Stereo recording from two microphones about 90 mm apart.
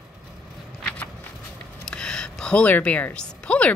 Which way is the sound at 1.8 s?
10° left (ahead or behind).